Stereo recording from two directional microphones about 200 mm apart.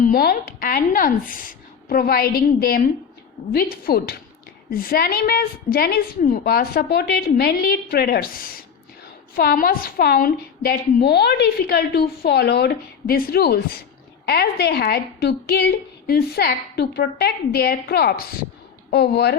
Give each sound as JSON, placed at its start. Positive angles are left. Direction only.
{"t": 0.0, "sound": "a woman's voice", "side_deg": 50}